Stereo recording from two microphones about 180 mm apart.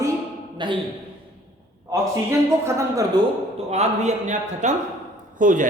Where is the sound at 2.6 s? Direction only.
15° right (ahead or behind).